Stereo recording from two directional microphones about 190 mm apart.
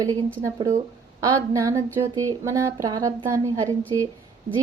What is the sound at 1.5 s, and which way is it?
A woman's voice, 15° right (ahead or behind).